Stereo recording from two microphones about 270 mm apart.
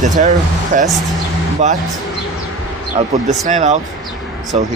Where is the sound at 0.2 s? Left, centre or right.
Right.